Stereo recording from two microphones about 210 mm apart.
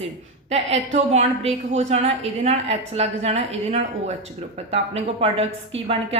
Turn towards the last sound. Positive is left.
turn(degrees=-30)  # may be behind; listen again after turning